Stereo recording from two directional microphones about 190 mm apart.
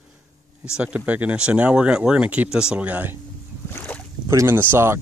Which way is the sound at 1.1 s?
5° right (ahead or behind).